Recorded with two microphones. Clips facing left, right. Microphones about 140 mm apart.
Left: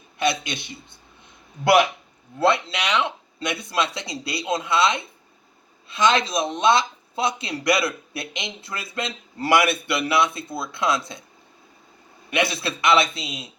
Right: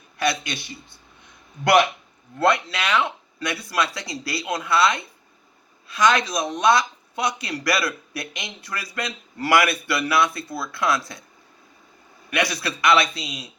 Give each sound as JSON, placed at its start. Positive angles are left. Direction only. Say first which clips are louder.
{"t": 0.2, "sound": "speech", "louder": "left 1 dB", "side_deg": 20}
{"t": 2.5, "sound": "speech", "louder": "right 1 dB", "side_deg": 25}
{"t": 12.3, "sound": "speech", "louder": "left 1 dB", "side_deg": 25}